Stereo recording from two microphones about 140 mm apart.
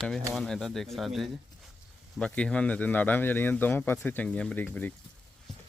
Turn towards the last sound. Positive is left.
turn(degrees=10)  # may be behind; listen again after turning